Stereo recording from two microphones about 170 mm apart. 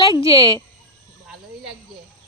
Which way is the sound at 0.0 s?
30° left (ahead or behind).